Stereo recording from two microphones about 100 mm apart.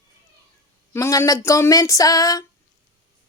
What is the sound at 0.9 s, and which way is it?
Speech, 25° left (ahead or behind).